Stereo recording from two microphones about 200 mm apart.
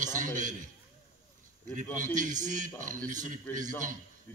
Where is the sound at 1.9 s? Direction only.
40° right (ahead or behind).